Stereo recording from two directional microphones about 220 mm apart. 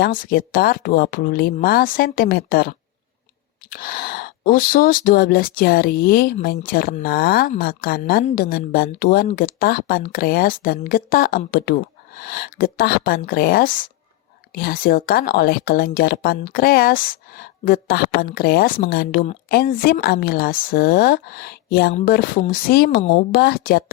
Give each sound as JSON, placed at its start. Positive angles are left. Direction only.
{"t": 0.0, "sound": "a woman's voice", "side_deg": 40}